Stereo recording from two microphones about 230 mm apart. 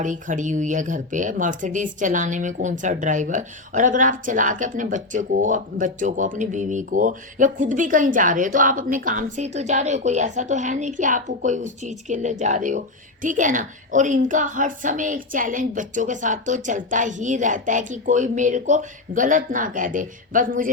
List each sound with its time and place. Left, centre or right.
0.0 s speech: right